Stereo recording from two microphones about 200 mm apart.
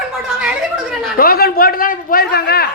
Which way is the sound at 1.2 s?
50° left (ahead or behind).